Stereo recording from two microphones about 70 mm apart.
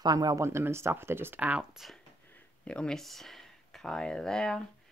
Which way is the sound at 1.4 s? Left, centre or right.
Right.